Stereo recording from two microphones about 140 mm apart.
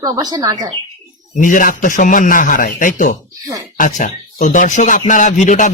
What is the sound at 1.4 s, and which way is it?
A man's voice, 70° left (ahead or behind).